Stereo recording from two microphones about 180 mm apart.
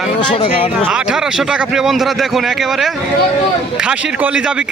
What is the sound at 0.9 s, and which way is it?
A man's voice, 5° right (ahead or behind).